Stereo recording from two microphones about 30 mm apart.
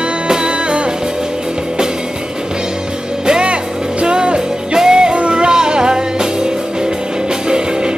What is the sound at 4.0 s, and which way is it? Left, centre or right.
Music, right.